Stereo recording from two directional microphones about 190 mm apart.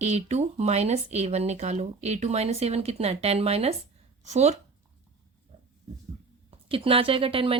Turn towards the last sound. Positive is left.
turn(degrees=-30)  # may be behind; listen again after turning